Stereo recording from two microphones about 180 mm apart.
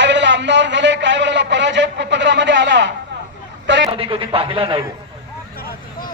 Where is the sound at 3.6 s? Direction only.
90° right.